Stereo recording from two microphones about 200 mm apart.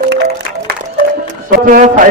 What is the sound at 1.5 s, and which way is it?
Speech, 45° right (ahead or behind).